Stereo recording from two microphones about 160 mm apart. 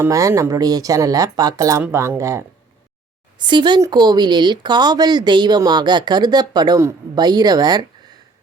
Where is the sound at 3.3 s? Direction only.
30° right (ahead or behind).